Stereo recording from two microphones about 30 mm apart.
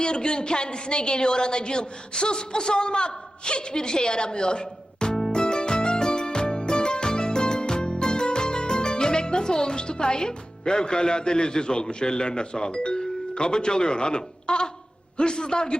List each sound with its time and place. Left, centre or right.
0.0 s a woman's voice: left
5.3 s music: left
15.2 s a woman's voice: left